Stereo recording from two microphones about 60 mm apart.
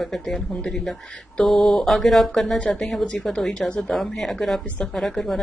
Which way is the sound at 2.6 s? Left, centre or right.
Centre.